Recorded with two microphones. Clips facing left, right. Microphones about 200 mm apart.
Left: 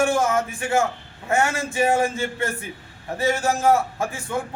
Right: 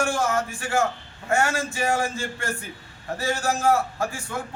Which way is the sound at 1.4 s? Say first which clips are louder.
Left 5 dB; 20° left (ahead or behind).